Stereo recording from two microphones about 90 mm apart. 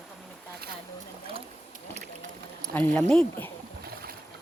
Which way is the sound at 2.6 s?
15° left (ahead or behind).